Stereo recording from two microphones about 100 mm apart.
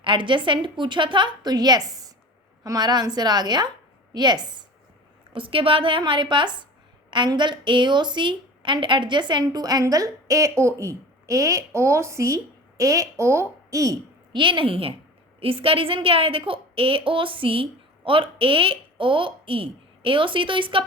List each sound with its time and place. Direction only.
0.0 s a woman's voice: 55° right (ahead or behind)
5.3 s a woman's voice: 65° right (ahead or behind); by 14.0 s 35° right (ahead or behind)
14.3 s a woman's voice: 55° right (ahead or behind)